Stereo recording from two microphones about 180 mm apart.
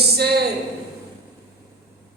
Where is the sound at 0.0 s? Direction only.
65° right (ahead or behind).